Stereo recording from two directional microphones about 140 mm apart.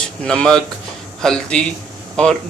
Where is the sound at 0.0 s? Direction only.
5° left (ahead or behind).